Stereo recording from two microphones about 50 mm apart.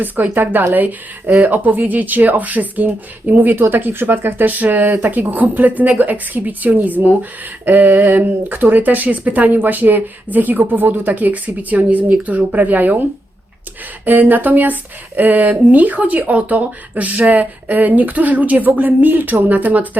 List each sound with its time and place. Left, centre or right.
0.0 s speech: right
14.0 s speech: right